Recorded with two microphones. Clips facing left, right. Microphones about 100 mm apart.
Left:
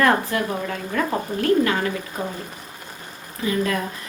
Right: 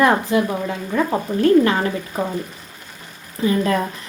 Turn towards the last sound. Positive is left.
turn(degrees=-30)  # may be behind; listen again after turning